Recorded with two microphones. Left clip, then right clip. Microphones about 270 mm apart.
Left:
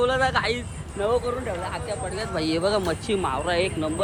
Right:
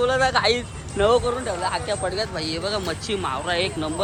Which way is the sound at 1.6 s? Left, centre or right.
Right.